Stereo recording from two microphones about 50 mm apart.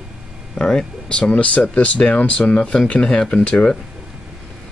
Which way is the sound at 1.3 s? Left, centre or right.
Left.